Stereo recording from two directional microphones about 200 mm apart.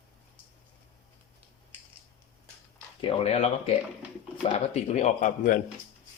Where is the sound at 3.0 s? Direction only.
30° left (ahead or behind).